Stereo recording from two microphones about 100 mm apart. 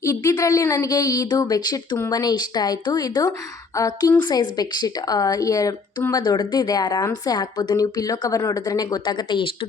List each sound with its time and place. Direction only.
0.0 s a woman's voice: 30° left (ahead or behind); by 9.5 s 50° left (ahead or behind)